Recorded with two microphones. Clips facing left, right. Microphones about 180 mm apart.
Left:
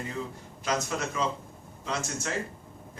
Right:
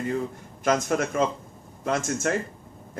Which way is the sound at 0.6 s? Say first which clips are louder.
Right 7 dB; 50° right (ahead or behind).